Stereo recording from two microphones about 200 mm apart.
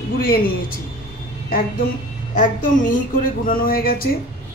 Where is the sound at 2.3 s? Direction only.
40° left (ahead or behind).